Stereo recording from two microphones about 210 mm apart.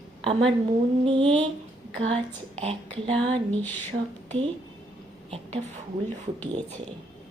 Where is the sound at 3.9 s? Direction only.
50° right (ahead or behind).